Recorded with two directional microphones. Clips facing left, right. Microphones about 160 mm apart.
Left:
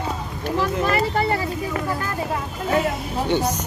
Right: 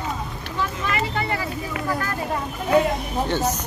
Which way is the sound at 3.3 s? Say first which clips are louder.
Left 4 dB; 10° left (ahead or behind).